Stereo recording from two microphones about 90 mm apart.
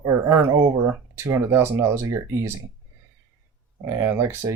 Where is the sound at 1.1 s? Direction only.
30° right (ahead or behind).